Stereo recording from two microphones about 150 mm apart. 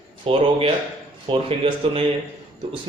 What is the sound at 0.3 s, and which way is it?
Speech, 35° right (ahead or behind).